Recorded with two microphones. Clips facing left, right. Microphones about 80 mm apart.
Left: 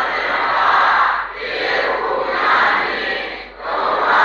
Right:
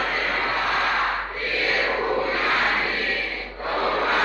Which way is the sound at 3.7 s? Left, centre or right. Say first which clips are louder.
Left 7 dB; left.